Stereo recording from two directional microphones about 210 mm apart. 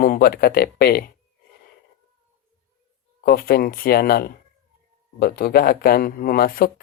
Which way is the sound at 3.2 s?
45° left (ahead or behind).